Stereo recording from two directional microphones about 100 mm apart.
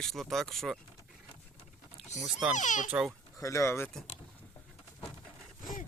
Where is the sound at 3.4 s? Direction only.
30° left (ahead or behind).